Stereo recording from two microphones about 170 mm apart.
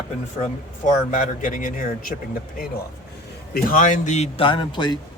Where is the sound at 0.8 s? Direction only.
50° left (ahead or behind).